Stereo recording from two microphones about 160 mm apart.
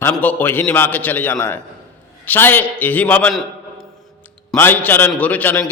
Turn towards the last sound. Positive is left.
turn(degrees=10)  # may be behind; listen again after turning